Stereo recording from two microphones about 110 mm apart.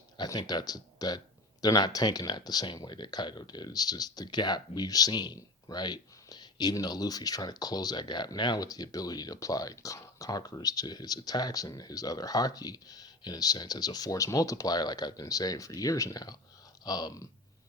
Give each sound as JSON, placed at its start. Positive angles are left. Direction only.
{"t": 0.2, "sound": "speech", "side_deg": 35}